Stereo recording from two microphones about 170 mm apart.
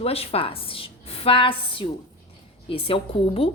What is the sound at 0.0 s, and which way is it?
Speech, 35° left (ahead or behind).